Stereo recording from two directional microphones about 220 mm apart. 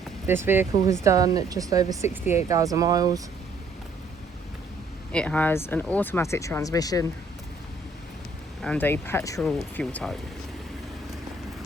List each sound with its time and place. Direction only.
0.3 s speech: 10° right (ahead or behind)
5.1 s speech: 5° left (ahead or behind)
8.6 s speech: 5° left (ahead or behind)